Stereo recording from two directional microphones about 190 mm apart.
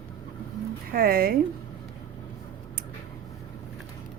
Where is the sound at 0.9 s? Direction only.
50° right (ahead or behind).